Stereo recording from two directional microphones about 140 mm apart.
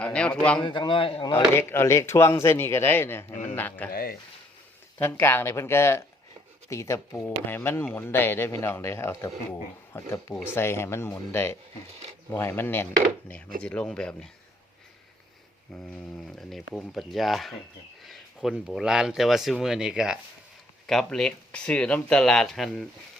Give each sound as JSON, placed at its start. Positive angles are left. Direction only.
{"t": 0.0, "sound": "a man's voice", "side_deg": 10}
{"t": 0.6, "sound": "a man's voice", "side_deg": 35}
{"t": 1.3, "sound": "speech", "side_deg": 15}
{"t": 3.9, "sound": "speech", "side_deg": 90}
{"t": 4.9, "sound": "speech", "side_deg": 15}
{"t": 15.7, "sound": "speech", "side_deg": 5}